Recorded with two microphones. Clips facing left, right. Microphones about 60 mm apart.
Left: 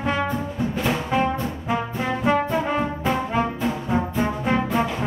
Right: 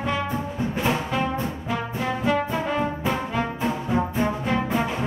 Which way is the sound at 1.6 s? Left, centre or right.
Left.